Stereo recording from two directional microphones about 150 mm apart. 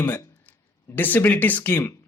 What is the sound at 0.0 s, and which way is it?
Speech, 15° left (ahead or behind).